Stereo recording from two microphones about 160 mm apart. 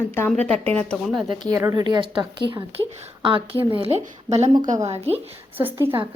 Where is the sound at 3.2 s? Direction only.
30° right (ahead or behind).